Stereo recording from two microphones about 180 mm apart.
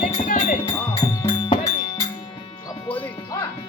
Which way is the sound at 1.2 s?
25° left (ahead or behind).